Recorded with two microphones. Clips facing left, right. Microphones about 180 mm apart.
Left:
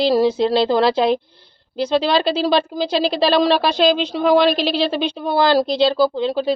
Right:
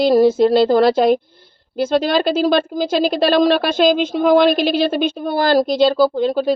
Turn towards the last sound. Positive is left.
turn(degrees=-50)  # may be behind; listen again after turning